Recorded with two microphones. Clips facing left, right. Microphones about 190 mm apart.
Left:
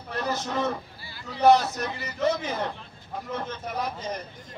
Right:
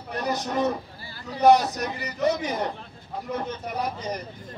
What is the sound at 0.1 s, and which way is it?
A man's voice, 15° right (ahead or behind).